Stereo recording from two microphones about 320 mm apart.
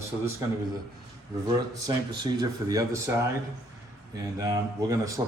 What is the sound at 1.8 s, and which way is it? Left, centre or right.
Speech, centre.